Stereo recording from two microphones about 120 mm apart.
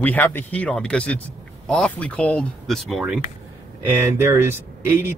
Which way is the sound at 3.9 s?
20° right (ahead or behind).